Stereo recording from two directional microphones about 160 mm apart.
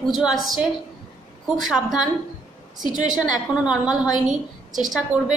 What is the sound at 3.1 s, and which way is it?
A woman's voice, 5° right (ahead or behind).